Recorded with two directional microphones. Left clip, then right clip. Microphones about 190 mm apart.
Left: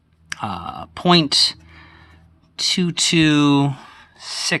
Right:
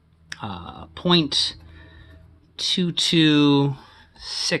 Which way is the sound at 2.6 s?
35° left (ahead or behind).